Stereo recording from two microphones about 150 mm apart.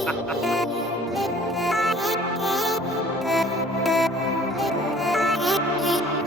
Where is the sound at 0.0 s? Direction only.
5° left (ahead or behind).